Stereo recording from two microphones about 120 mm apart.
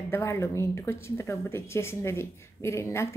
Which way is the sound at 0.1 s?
20° left (ahead or behind).